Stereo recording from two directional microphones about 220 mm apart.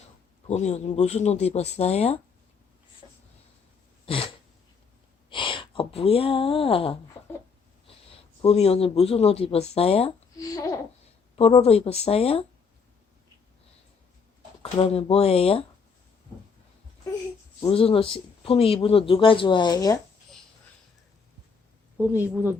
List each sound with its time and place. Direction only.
0.4 s speech: 30° left (ahead or behind)
4.0 s a sound: 25° left (ahead or behind)
5.3 s speech: 20° left (ahead or behind)
10.4 s a sound: 15° left (ahead or behind)
11.3 s speech: 25° left (ahead or behind)
14.6 s speech: 25° left (ahead or behind)
17.6 s speech: 25° left (ahead or behind)
21.9 s a woman's voice: 5° right (ahead or behind)